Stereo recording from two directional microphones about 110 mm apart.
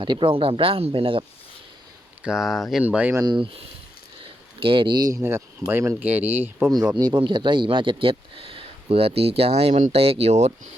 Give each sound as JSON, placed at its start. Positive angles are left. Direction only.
{"t": 0.0, "sound": "speech", "side_deg": -45}
{"t": 2.2, "sound": "speech", "side_deg": -5}
{"t": 3.2, "sound": "speech", "side_deg": -45}
{"t": 4.6, "sound": "speech", "side_deg": -50}
{"t": 5.2, "sound": "speech", "side_deg": -20}
{"t": 6.7, "sound": "speech", "side_deg": -35}